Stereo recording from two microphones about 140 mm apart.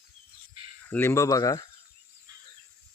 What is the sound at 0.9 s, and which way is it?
Speech, 15° left (ahead or behind).